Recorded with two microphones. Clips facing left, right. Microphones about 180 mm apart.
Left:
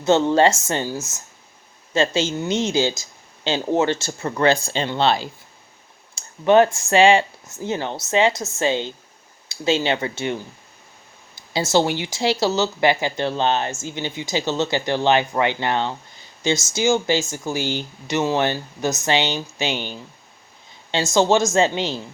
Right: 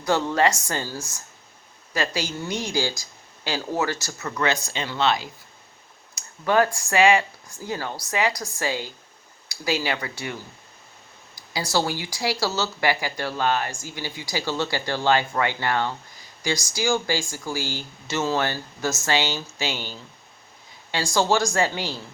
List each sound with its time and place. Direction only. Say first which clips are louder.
0.0 s speech: left 6 dB; 25° left (ahead or behind)
11.3 s speech: left 6 dB; 25° left (ahead or behind)